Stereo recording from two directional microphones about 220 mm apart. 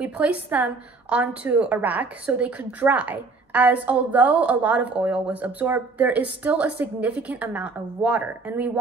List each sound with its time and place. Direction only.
0.0 s a woman's voice: 5° right (ahead or behind)